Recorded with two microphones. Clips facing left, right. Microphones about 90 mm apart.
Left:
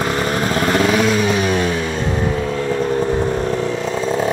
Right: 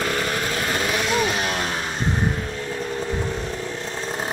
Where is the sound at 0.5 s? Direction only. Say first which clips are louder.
Left 8 dB; 70° left (ahead or behind).